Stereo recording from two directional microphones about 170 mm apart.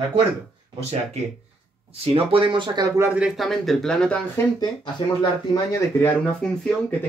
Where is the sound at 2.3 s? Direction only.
30° right (ahead or behind).